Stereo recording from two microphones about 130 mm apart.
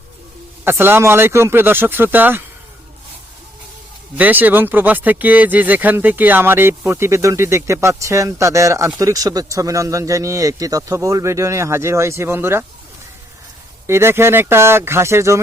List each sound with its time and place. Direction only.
0.6 s speech: 15° right (ahead or behind)
4.2 s a man's voice: 15° right (ahead or behind)
13.8 s a man's voice: 20° right (ahead or behind)